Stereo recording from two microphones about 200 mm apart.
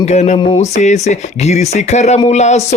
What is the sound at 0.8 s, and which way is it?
Speech, 35° left (ahead or behind).